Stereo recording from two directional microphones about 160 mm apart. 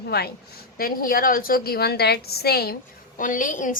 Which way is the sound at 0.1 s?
80° left.